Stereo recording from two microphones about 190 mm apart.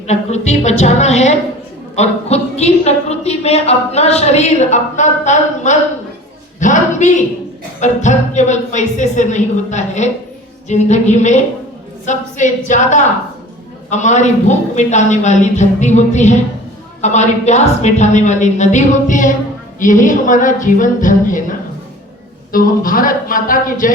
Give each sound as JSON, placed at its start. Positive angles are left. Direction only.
{"t": 0.1, "sound": "a woman's voice", "side_deg": 35}
{"t": 22.5, "sound": "speech", "side_deg": 45}